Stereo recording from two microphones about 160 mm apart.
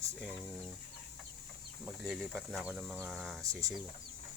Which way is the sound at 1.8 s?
5° right (ahead or behind).